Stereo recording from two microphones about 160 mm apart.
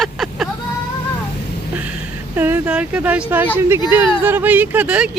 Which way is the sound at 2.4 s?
15° right (ahead or behind).